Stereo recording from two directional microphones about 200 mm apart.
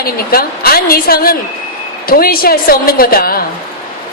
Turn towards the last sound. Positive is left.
turn(degrees=50)  # may be behind; listen again after turning